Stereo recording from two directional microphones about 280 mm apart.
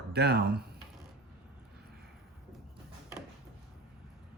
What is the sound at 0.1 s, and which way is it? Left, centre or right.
Speech, right.